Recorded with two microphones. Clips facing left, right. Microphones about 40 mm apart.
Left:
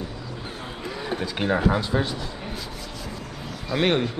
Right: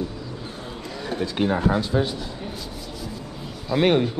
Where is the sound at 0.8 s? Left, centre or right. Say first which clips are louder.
Left 1 dB; centre.